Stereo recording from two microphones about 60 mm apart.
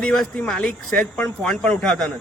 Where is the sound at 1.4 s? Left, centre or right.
Centre.